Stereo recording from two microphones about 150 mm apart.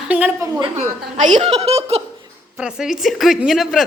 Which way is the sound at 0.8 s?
55° right (ahead or behind).